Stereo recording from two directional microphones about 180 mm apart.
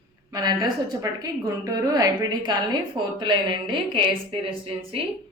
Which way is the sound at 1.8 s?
20° right (ahead or behind).